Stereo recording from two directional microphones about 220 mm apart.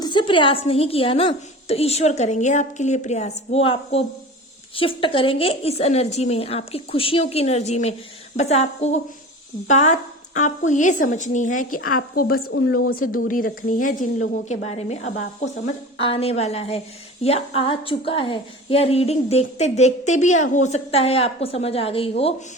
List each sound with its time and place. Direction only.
0.0 s speech: 20° left (ahead or behind); by 12.4 s 40° left (ahead or behind)
12.5 s a woman's voice: 60° left (ahead or behind)
12.9 s speech: 40° left (ahead or behind)